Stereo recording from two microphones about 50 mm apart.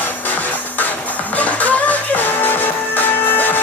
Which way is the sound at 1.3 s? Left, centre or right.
Left.